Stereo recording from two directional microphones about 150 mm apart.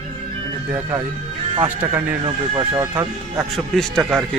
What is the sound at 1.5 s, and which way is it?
Speech, 35° right (ahead or behind).